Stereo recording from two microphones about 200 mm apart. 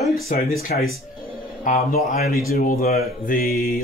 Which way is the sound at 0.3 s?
45° left (ahead or behind).